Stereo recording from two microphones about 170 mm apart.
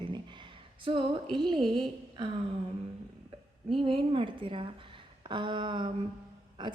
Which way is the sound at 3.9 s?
30° right (ahead or behind).